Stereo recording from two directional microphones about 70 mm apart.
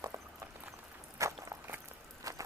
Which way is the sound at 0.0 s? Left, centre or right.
Right.